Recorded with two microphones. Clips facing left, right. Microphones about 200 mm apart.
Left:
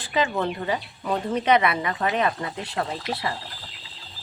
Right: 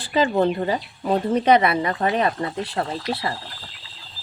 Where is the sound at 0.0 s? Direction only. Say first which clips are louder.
Right 5 dB; 35° right (ahead or behind).